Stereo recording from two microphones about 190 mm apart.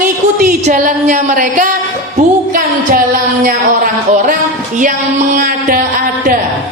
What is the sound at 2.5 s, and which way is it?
Music, 50° right (ahead or behind).